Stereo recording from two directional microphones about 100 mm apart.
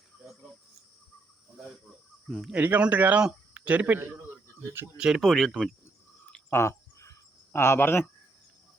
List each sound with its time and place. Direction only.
2.2 s speech: centre (ahead or behind)
2.6 s a man's voice: 15° right (ahead or behind)
4.9 s speech: 5° right (ahead or behind)
6.5 s cricket: 30° left (ahead or behind)